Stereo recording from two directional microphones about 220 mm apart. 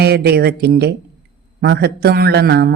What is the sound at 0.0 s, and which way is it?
Speech, 45° right (ahead or behind).